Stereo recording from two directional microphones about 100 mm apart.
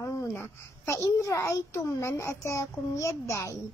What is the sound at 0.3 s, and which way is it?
Child singing, 25° left (ahead or behind).